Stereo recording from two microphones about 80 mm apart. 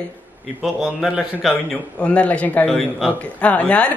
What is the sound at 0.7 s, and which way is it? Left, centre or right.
Speech, centre.